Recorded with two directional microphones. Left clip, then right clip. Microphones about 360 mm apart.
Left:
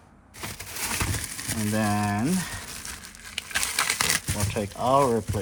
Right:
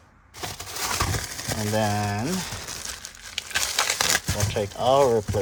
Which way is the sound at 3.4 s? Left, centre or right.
Centre.